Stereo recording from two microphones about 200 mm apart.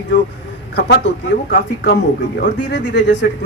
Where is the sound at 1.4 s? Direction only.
55° left (ahead or behind).